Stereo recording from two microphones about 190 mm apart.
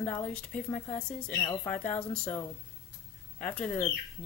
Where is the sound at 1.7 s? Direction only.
5° left (ahead or behind).